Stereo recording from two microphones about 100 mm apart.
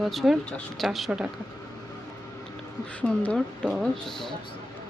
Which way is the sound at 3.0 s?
10° left (ahead or behind).